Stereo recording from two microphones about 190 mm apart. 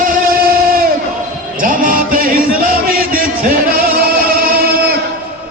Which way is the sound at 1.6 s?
45° right (ahead or behind).